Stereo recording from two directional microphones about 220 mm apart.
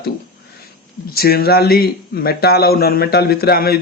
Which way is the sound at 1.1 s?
45° left (ahead or behind).